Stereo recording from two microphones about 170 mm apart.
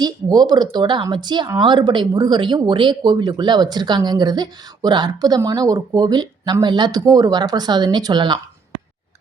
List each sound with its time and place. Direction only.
0.0 s speech: 25° right (ahead or behind)